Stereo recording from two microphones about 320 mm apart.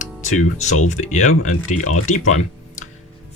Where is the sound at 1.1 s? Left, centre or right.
Left.